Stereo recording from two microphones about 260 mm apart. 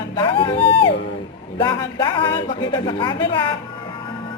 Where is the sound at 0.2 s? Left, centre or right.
Centre.